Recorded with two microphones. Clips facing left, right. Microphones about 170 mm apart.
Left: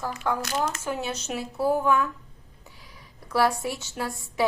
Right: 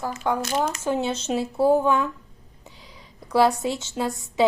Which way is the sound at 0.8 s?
25° right (ahead or behind).